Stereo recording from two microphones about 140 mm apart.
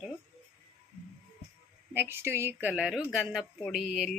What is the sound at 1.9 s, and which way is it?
Speech, 15° right (ahead or behind).